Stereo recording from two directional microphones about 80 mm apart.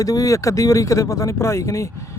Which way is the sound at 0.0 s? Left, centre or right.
Left.